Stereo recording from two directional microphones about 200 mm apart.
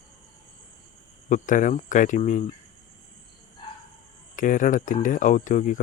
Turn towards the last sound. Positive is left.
turn(degrees=40)  # may be behind; listen again after turning